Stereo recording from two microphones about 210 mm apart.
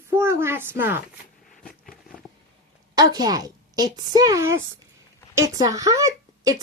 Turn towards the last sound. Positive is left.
turn(degrees=-15)  # may be behind; listen again after turning